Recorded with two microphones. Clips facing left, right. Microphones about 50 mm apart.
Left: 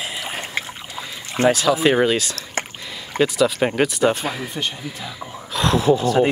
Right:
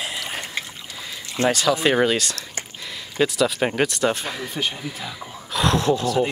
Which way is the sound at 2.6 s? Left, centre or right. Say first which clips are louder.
Left 8 dB; left.